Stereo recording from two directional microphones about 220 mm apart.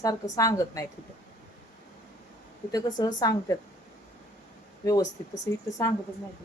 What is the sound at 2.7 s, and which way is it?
Speech, 15° left (ahead or behind).